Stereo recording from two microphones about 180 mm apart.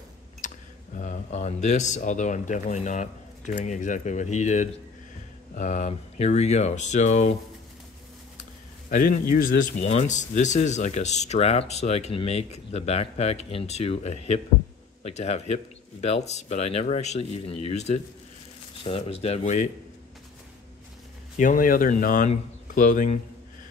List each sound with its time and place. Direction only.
0.4 s tick: 45° left (ahead or behind)
0.9 s speech: 45° left (ahead or behind)
8.9 s speech: 50° left (ahead or behind)
21.4 s speech: 50° left (ahead or behind)